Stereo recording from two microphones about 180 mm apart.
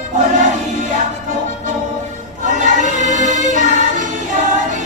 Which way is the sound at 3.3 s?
40° left (ahead or behind).